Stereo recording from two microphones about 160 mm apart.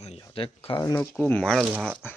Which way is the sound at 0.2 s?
30° left (ahead or behind).